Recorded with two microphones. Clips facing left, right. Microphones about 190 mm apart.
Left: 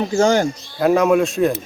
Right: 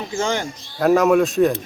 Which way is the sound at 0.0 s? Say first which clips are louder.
Left 7 dB; 40° left (ahead or behind).